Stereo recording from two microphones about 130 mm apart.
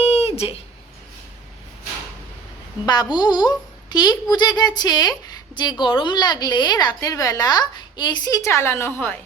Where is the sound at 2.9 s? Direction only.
35° left (ahead or behind); by 9.2 s 20° left (ahead or behind).